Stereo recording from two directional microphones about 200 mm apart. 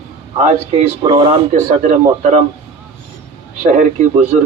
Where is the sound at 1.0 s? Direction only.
20° right (ahead or behind).